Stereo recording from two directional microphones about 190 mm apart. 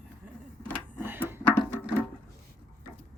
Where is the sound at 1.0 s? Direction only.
10° right (ahead or behind).